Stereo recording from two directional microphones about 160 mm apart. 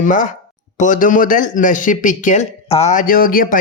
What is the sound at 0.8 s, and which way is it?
Speech, 55° left (ahead or behind).